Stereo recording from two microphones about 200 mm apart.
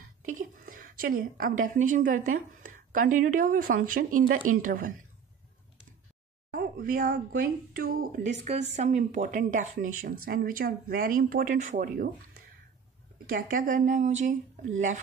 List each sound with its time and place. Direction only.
0.7 s a woman's voice: 45° right (ahead or behind)
6.5 s a woman's voice: 45° right (ahead or behind)